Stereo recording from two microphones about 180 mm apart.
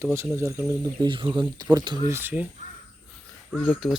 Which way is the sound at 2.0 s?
10° right (ahead or behind).